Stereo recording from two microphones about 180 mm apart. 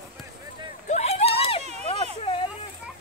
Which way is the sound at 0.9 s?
35° left (ahead or behind).